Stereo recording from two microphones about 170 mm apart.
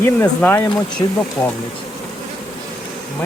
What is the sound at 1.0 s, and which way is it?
Speech, 20° left (ahead or behind).